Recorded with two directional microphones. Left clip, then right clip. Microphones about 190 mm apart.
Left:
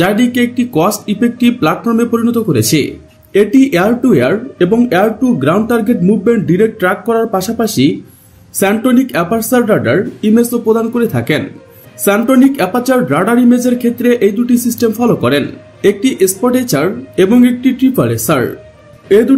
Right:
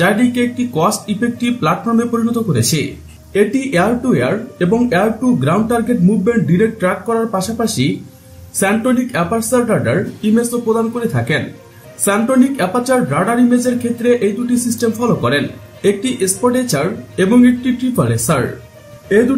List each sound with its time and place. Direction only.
0.0 s speech: 40° left (ahead or behind)